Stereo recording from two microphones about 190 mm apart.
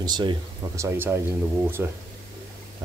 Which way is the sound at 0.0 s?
25° right (ahead or behind).